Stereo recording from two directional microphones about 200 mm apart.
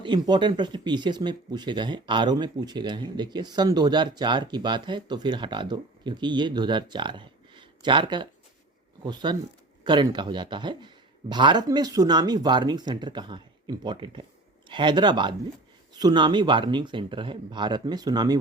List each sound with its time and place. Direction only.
0.0 s speech: 25° right (ahead or behind)